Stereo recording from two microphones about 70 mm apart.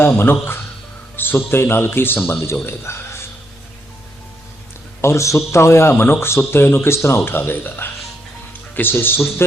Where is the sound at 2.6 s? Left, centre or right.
Left.